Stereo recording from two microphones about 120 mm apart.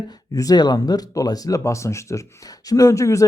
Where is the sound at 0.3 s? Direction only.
35° left (ahead or behind).